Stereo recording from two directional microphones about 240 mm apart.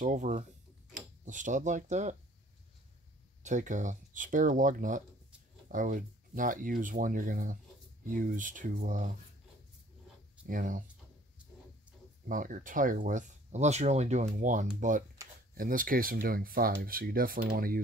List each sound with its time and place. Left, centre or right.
0.0 s speech: right
3.4 s speech: right
10.4 s speech: right
12.3 s speech: right